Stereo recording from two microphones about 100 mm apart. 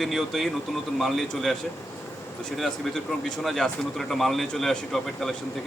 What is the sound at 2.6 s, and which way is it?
Speech, centre (ahead or behind).